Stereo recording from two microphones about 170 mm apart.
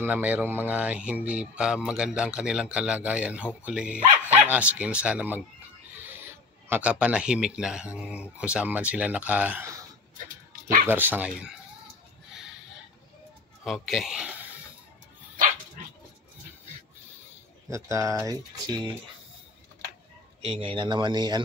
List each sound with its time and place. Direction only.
0.0 s speech: 10° right (ahead or behind)
6.7 s speech: 5° right (ahead or behind)
10.2 s dog: 55° right (ahead or behind)
10.9 s speech: 10° right (ahead or behind)
13.7 s speech: centre (ahead or behind)
17.6 s speech: 15° right (ahead or behind)
20.6 s speech: 30° right (ahead or behind)